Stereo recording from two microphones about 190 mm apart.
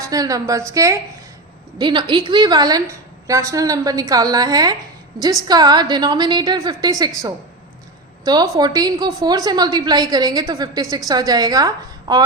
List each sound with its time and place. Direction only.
0.0 s a woman's voice: 20° right (ahead or behind)
8.2 s a woman's voice: 20° right (ahead or behind)